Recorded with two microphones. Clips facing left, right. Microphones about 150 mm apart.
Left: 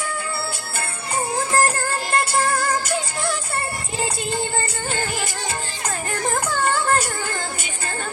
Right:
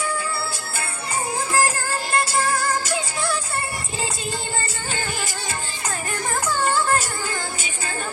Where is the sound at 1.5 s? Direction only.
55° left (ahead or behind).